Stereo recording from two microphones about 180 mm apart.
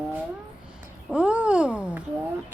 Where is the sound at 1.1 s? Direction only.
5° right (ahead or behind).